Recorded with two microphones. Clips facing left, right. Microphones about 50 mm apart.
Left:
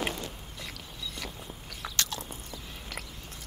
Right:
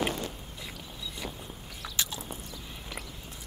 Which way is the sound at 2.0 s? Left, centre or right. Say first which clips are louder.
Left 1 dB; left.